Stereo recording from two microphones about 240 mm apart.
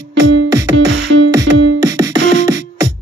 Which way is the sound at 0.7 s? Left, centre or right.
Right.